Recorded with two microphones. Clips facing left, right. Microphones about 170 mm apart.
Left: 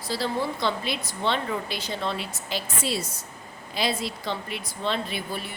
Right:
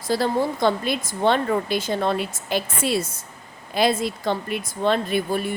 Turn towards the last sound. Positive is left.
turn(degrees=-50)  # may be behind; listen again after turning